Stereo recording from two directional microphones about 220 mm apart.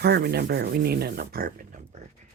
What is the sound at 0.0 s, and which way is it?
Speech, 45° right (ahead or behind).